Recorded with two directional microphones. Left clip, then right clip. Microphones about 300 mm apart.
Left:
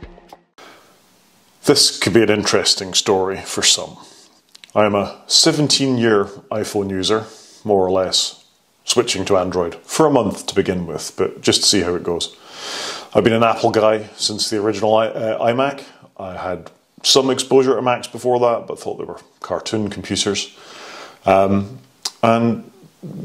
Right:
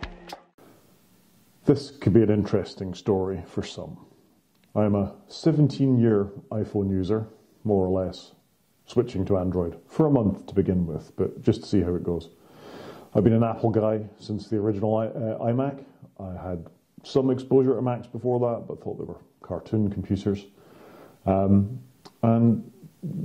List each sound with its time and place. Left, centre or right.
1.6 s speech: centre
7.6 s speech: centre